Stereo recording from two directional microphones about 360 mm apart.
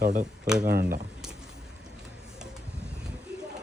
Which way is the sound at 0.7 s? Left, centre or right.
Right.